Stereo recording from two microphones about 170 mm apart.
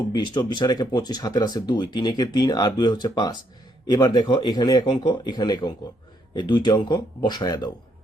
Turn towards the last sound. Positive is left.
turn(degrees=25)  # may be behind; listen again after turning